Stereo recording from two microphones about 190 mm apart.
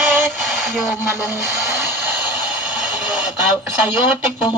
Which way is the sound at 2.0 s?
10° right (ahead or behind).